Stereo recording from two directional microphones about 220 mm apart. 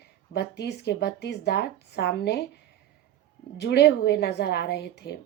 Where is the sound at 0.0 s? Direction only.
50° left (ahead or behind).